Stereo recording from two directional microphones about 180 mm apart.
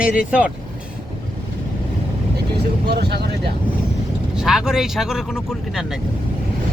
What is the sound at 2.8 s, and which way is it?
Speech, 65° right (ahead or behind).